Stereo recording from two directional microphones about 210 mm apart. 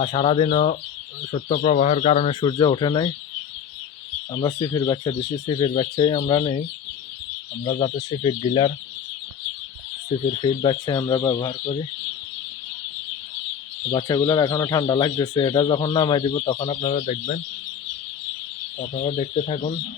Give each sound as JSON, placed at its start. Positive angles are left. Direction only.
{"t": 0.0, "sound": "speech", "side_deg": 25}
{"t": 4.3, "sound": "speech", "side_deg": 20}
{"t": 10.4, "sound": "speech", "side_deg": 25}
{"t": 13.9, "sound": "speech", "side_deg": 20}
{"t": 17.0, "sound": "speech", "side_deg": 35}
{"t": 18.8, "sound": "speech", "side_deg": 30}